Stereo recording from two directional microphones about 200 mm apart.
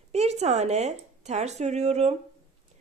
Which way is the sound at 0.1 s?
35° right (ahead or behind).